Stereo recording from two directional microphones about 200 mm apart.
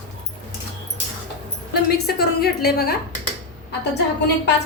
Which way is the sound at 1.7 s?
50° left (ahead or behind).